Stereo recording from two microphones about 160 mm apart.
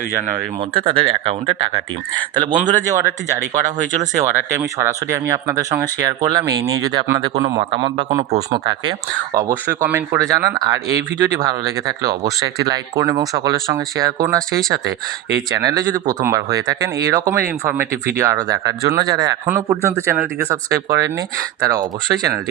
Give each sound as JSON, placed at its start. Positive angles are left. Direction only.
{"t": 0.7, "sound": "speech", "side_deg": -35}
{"t": 4.2, "sound": "speech", "side_deg": -20}
{"t": 9.6, "sound": "speech", "side_deg": -15}
{"t": 11.9, "sound": "speech", "side_deg": -20}
{"t": 15.5, "sound": "speech", "side_deg": -25}